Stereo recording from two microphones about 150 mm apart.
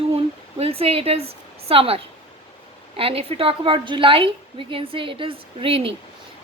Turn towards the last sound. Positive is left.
turn(degrees=-40)  # may be behind; listen again after turning